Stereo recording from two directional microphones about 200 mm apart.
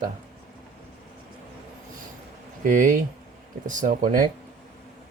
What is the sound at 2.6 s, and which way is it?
Speech, 40° right (ahead or behind).